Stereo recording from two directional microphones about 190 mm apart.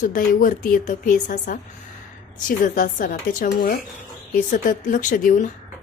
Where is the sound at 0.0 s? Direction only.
45° left (ahead or behind).